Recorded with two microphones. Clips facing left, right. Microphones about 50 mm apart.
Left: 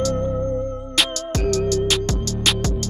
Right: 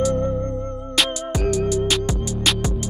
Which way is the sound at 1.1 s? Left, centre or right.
Centre.